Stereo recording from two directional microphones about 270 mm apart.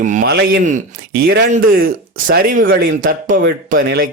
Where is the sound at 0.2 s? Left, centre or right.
Right.